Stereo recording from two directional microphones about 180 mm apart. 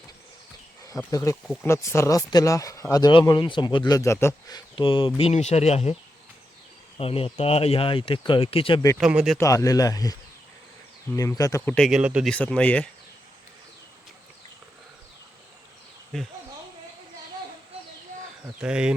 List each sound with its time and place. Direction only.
0.9 s speech: 20° left (ahead or behind); by 6.0 s 35° left (ahead or behind)
7.0 s speech: 30° left (ahead or behind)
9.0 s speech: 5° right (ahead or behind)
9.4 s speech: 15° left (ahead or behind); by 12.3 s 5° right (ahead or behind)
12.3 s speech: 5° left (ahead or behind)
18.6 s speech: 5° right (ahead or behind)